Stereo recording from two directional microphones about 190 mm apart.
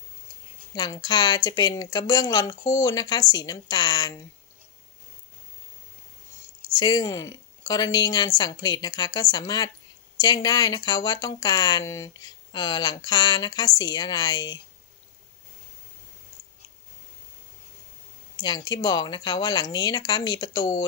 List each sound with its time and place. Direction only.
0.7 s speech: 20° left (ahead or behind)
6.7 s speech: 20° left (ahead or behind)
18.3 s speech: 20° left (ahead or behind)